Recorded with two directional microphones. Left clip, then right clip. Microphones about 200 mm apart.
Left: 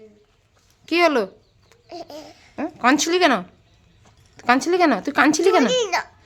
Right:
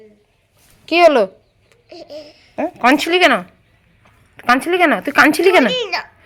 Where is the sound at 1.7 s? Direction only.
10° left (ahead or behind).